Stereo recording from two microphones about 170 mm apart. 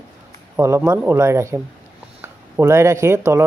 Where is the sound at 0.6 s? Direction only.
15° right (ahead or behind).